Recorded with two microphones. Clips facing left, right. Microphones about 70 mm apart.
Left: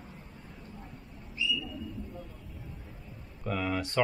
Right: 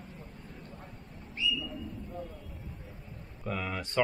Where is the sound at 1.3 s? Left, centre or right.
Right.